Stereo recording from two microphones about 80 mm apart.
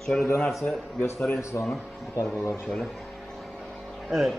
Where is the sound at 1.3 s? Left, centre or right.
Left.